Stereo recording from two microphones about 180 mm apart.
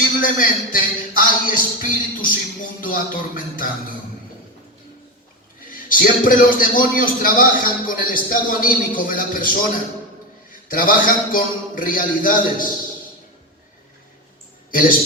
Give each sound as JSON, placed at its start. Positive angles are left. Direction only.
{"t": 0.2, "sound": "a man's voice", "side_deg": 50}
{"t": 5.7, "sound": "a man's voice", "side_deg": 50}
{"t": 10.5, "sound": "a man's voice", "side_deg": 50}
{"t": 14.7, "sound": "a man's voice", "side_deg": 50}